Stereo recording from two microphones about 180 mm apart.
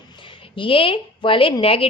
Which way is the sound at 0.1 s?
30° left (ahead or behind).